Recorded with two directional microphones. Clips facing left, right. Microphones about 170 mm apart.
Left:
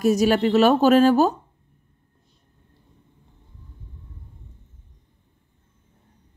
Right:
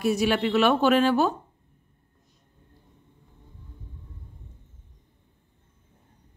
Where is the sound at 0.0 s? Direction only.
40° left (ahead or behind).